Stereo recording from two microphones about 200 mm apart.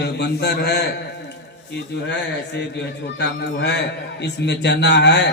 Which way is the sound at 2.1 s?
60° left (ahead or behind).